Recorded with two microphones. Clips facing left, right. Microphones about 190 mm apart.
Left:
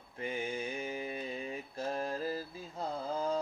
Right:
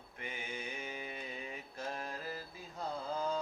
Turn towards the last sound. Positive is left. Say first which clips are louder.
# left 3 dB
turn(degrees=30)  # may be behind; listen again after turning